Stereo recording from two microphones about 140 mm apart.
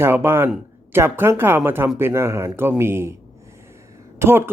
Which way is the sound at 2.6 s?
15° right (ahead or behind).